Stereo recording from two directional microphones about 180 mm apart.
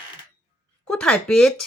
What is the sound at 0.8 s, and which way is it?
Speech, 5° left (ahead or behind).